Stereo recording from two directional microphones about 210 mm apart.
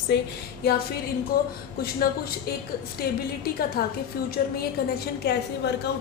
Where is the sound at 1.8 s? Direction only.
45° left (ahead or behind).